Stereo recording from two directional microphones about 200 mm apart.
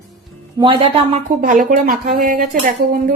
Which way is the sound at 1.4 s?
45° right (ahead or behind).